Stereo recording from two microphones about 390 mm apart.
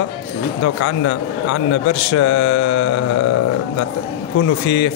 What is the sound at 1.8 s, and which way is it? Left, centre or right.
Speech, left.